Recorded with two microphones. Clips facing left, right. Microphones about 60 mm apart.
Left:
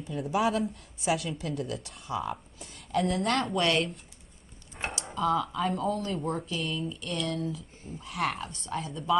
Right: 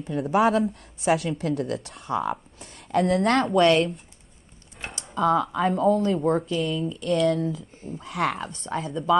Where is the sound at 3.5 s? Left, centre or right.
Right.